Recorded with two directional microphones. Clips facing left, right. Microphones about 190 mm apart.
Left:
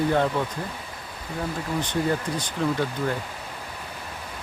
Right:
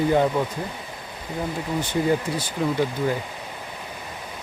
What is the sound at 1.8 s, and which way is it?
Speech, 10° right (ahead or behind).